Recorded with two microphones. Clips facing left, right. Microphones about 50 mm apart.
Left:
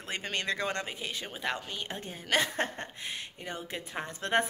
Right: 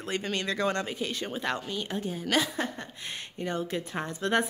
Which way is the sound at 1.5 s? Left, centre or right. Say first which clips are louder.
Right 5 dB; left.